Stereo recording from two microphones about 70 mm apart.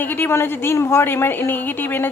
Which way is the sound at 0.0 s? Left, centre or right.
Left.